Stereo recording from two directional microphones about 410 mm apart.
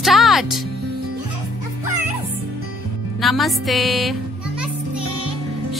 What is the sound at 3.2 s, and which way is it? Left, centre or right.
Music, centre.